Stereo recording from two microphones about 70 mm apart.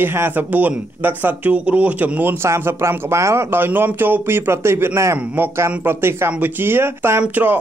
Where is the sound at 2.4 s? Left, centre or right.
Right.